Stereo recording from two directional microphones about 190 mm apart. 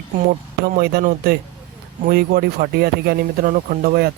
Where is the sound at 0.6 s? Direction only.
55° right (ahead or behind).